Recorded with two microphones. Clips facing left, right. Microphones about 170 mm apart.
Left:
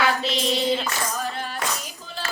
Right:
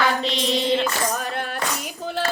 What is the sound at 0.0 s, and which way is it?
Mantra, 5° left (ahead or behind).